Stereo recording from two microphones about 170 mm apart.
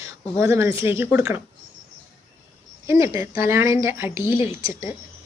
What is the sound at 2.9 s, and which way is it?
A woman's voice, 15° right (ahead or behind).